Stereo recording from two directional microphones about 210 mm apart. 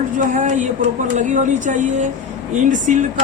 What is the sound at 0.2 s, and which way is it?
A woman's voice, 35° right (ahead or behind).